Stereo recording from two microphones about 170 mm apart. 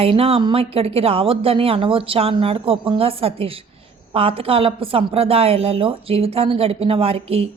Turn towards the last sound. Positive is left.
turn(degrees=-35)  # may be behind; listen again after turning